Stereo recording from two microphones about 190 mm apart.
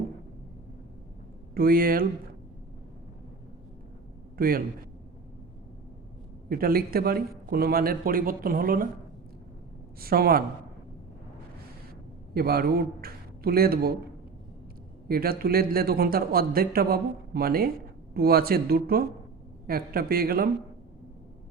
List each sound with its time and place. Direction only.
1.5 s a man's voice: 50° right (ahead or behind)
4.4 s a man's voice: 50° right (ahead or behind)
6.5 s a man's voice: 50° right (ahead or behind)
10.0 s a man's voice: 50° right (ahead or behind)
12.3 s a man's voice: 50° right (ahead or behind)
15.0 s a man's voice: 50° right (ahead or behind)